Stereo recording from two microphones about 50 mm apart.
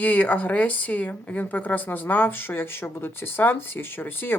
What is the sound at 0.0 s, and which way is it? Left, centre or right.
A woman's voice, left.